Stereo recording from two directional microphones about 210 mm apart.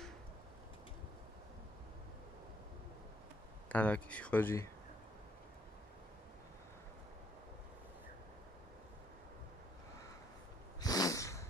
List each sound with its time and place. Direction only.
3.6 s speech: 5° left (ahead or behind)
10.8 s snort: 15° left (ahead or behind)